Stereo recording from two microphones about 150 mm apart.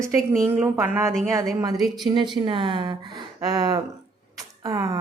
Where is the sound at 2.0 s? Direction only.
30° right (ahead or behind).